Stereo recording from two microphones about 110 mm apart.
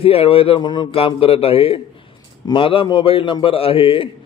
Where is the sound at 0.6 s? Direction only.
40° left (ahead or behind).